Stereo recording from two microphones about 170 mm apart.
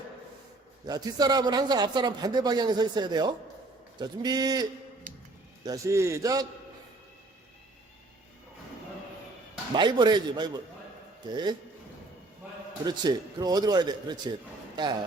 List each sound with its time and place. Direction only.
0.9 s speech: 25° right (ahead or behind)
5.1 s a sound: 50° right (ahead or behind)
5.6 s speech: 20° right (ahead or behind)
9.7 s speech: 25° right (ahead or behind)
12.8 s speech: 25° right (ahead or behind)